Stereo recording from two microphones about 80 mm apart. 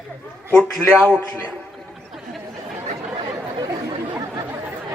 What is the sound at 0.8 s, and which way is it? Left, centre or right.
Speech, centre.